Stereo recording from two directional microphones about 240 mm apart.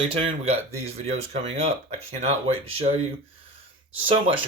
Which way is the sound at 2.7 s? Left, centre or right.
Right.